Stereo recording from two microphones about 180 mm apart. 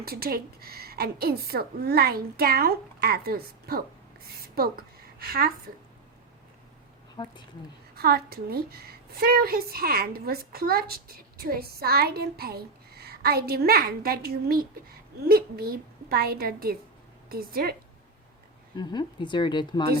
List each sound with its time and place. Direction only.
0.0 s a woman's voice: 60° right (ahead or behind)
7.2 s speech: 25° left (ahead or behind)
7.9 s a woman's voice: 60° right (ahead or behind)
18.8 s speech: 25° left (ahead or behind)